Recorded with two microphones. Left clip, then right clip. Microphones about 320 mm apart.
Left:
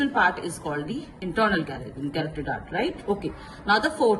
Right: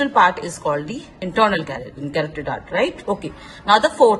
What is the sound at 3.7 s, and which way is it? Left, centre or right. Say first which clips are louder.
Speech: right 8 dB; centre.